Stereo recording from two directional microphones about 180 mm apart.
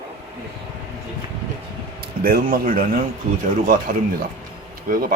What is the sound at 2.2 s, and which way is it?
Speech, 55° right (ahead or behind).